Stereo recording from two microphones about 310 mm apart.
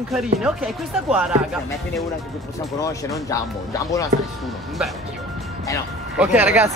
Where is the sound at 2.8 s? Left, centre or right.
Centre.